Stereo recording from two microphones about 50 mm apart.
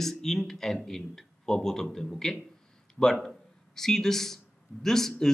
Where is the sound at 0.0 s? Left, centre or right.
Centre.